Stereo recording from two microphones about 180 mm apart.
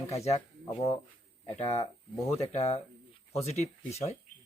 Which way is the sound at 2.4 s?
35° left (ahead or behind).